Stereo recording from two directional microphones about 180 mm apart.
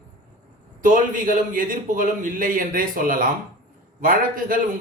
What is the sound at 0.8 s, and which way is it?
A man's voice, 45° right (ahead or behind).